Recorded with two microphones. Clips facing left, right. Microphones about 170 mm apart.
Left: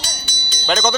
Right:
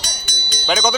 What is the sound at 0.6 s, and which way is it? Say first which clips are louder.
Speech: even; 5° right (ahead or behind).